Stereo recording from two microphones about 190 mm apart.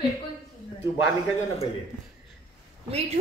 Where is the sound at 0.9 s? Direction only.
35° left (ahead or behind).